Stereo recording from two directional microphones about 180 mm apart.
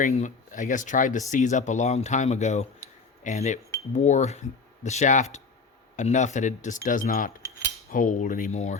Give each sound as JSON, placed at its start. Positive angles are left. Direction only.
{"t": 0.0, "sound": "speech", "side_deg": 40}